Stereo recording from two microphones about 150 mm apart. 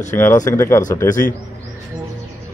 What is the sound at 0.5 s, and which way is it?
Speech, 20° left (ahead or behind).